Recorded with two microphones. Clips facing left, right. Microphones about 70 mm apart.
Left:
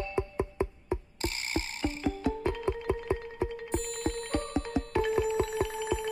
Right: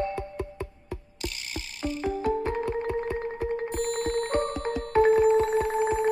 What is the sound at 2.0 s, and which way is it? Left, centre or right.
Music, right.